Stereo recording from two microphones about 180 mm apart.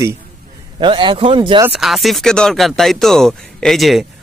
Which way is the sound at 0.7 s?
25° right (ahead or behind).